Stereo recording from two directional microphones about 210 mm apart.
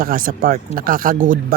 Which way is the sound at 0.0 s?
45° right (ahead or behind).